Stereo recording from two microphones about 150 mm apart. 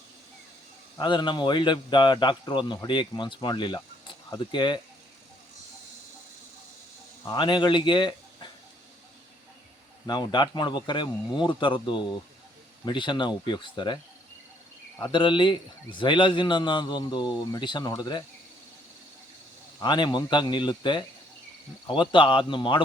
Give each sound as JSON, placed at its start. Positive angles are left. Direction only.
{"t": 0.9, "sound": "a man's voice", "side_deg": 30}
{"t": 7.3, "sound": "speech", "side_deg": 30}
{"t": 10.1, "sound": "a man's voice", "side_deg": 30}
{"t": 15.1, "sound": "a man's voice", "side_deg": 30}
{"t": 19.8, "sound": "a man's voice", "side_deg": 30}